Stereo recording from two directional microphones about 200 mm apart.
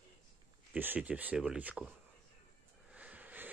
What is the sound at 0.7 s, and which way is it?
Speech, 10° right (ahead or behind).